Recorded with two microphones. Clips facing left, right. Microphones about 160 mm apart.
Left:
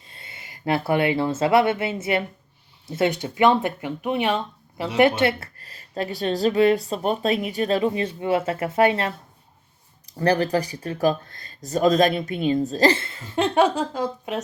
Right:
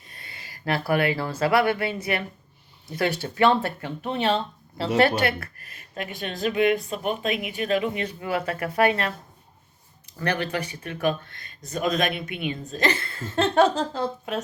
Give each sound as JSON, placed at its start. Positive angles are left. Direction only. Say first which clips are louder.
{"t": 0.1, "sound": "speech", "louder": "left 1 dB", "side_deg": 25}
{"t": 10.2, "sound": "speech", "louder": "left 6 dB", "side_deg": 35}